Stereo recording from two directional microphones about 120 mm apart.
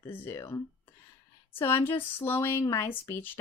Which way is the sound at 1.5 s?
20° left (ahead or behind).